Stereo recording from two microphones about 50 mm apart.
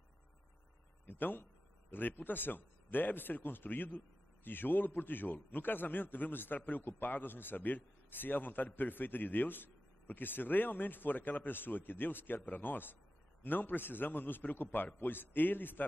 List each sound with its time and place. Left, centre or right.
1.0 s a man's voice: left